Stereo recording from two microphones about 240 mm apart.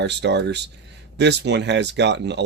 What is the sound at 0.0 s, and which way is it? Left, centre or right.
Speech, right.